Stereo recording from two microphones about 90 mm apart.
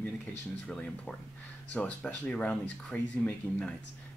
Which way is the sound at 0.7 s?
10° left (ahead or behind).